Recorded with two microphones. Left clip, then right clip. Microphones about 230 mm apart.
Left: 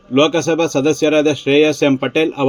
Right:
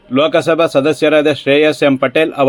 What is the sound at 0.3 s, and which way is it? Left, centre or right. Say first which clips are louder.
Speech: right 5 dB; right.